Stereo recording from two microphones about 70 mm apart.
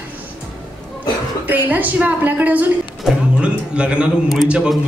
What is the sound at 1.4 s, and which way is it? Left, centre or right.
A woman's voice, right.